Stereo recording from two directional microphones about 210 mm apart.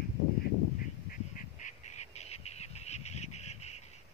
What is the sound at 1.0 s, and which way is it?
Duck, 40° left (ahead or behind).